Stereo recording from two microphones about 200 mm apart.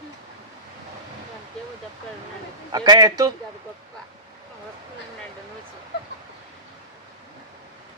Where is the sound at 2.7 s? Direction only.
20° right (ahead or behind).